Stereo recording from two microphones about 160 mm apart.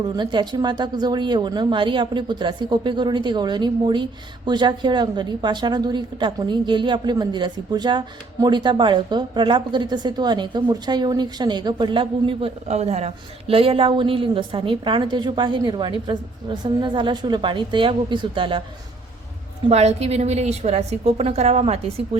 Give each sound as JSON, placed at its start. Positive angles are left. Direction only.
{"t": 0.2, "sound": "a woman's voice", "side_deg": -30}
{"t": 19.7, "sound": "a woman's voice", "side_deg": -40}